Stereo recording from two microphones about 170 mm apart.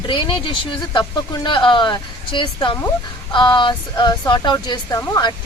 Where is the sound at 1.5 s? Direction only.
30° left (ahead or behind).